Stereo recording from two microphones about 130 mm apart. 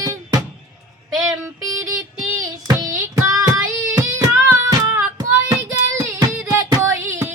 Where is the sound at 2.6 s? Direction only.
30° right (ahead or behind).